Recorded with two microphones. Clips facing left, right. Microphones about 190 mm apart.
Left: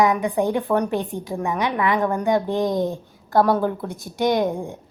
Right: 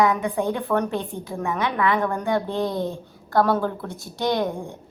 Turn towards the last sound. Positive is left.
turn(degrees=15)  # may be behind; listen again after turning